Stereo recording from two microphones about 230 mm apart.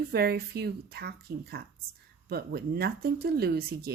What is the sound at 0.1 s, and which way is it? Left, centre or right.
A woman's voice, right.